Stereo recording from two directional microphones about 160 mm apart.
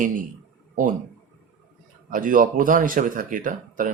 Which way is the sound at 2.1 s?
55° right (ahead or behind).